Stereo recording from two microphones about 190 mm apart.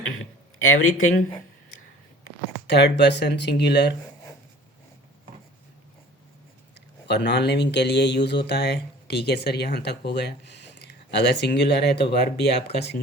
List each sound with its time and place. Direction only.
0.6 s speech: 90° left
2.6 s speech: 60° left (ahead or behind)
6.7 s speech: 65° left (ahead or behind)